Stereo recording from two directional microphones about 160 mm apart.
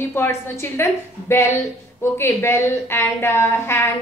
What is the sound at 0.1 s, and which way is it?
A woman's voice, 15° left (ahead or behind).